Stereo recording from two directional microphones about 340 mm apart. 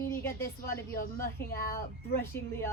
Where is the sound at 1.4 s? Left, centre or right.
Left.